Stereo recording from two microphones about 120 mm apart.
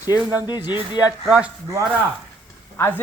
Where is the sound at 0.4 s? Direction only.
35° left (ahead or behind).